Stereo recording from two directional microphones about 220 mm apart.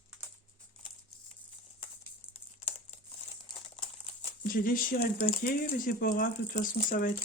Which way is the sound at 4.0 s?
35° left (ahead or behind).